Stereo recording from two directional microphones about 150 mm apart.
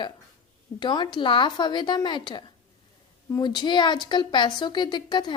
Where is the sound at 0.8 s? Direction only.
30° left (ahead or behind).